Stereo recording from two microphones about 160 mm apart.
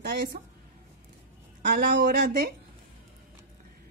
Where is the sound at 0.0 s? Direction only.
90° right.